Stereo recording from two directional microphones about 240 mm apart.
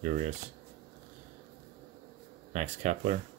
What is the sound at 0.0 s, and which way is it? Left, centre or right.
Speech, right.